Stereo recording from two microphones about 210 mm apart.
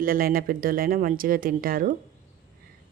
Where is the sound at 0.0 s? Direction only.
45° right (ahead or behind).